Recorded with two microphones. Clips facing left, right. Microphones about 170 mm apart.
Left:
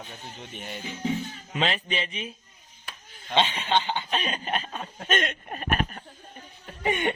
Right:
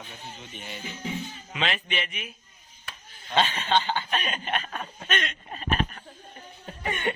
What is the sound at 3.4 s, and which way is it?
Chuckle, 20° left (ahead or behind).